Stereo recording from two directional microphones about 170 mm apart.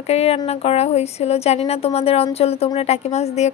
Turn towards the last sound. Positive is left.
turn(degrees=40)  # may be behind; listen again after turning